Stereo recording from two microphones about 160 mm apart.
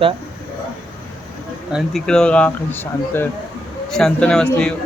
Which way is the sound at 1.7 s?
Centre (ahead or behind).